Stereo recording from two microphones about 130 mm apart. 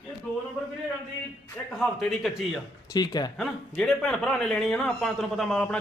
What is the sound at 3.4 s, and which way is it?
A man's voice, 5° left (ahead or behind).